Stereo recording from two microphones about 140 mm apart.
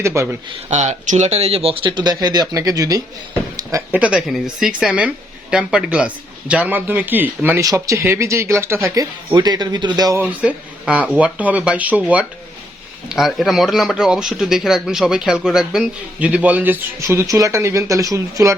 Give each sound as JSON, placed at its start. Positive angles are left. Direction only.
{"t": 0.0, "sound": "speech", "side_deg": -20}
{"t": 0.7, "sound": "speech", "side_deg": -55}
{"t": 4.0, "sound": "speech", "side_deg": -5}
{"t": 10.2, "sound": "speech", "side_deg": -10}